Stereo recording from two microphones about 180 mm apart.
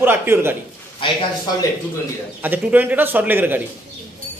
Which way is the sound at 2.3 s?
10° right (ahead or behind).